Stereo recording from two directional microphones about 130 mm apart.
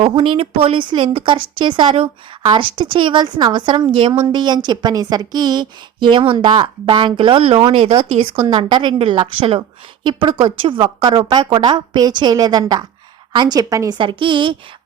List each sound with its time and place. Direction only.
0.0 s a woman's voice: 40° right (ahead or behind)
14.0 s speech: 40° right (ahead or behind)